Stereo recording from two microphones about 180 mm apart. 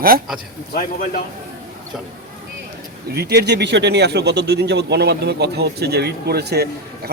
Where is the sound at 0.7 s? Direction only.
50° left (ahead or behind).